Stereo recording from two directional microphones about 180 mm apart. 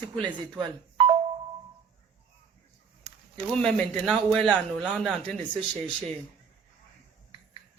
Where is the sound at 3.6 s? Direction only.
5° left (ahead or behind).